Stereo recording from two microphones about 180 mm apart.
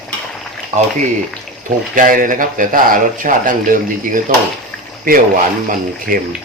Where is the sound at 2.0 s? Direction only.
50° right (ahead or behind).